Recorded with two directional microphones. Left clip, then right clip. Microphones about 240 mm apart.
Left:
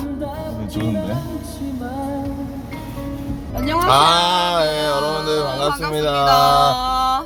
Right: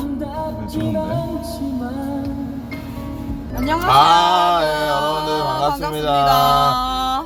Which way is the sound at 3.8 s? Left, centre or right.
Left.